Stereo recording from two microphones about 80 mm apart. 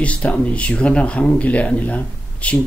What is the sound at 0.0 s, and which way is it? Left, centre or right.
Speech, centre.